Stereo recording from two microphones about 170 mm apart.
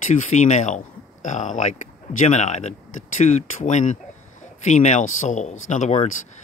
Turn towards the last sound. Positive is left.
turn(degrees=45)  # may be behind; listen again after turning